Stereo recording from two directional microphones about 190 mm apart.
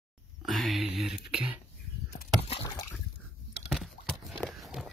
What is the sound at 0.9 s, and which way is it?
Speech, centre (ahead or behind).